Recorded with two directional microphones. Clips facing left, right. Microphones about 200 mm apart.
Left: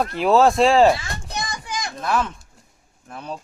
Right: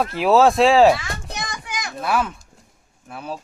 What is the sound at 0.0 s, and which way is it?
Speech, centre (ahead or behind).